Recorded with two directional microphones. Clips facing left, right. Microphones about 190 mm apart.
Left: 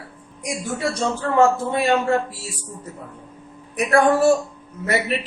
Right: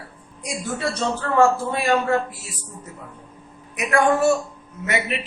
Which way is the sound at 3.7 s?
35° left (ahead or behind).